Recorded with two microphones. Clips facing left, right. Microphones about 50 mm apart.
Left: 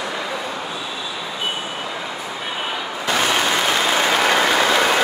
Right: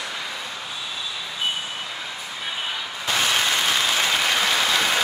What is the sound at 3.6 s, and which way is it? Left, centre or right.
Applause, left.